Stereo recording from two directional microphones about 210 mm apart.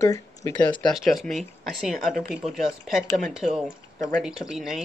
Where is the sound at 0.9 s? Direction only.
Centre (ahead or behind).